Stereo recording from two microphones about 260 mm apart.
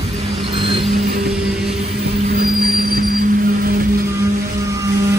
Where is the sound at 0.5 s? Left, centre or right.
Centre.